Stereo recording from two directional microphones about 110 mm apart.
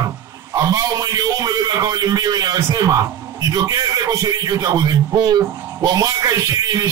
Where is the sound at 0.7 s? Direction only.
35° right (ahead or behind).